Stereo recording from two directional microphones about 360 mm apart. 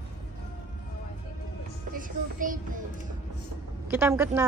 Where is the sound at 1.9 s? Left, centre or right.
Right.